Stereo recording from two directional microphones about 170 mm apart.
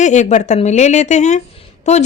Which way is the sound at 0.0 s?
45° left (ahead or behind).